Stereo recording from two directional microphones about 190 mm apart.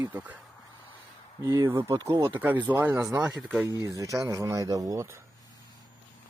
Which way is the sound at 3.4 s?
5° right (ahead or behind).